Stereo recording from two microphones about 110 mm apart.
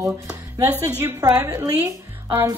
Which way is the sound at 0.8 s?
30° right (ahead or behind).